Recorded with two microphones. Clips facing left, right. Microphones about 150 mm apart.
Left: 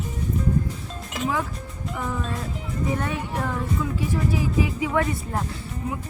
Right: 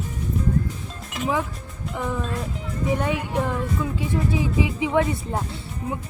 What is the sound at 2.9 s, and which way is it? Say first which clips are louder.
Speech: right 3 dB; 15° right (ahead or behind).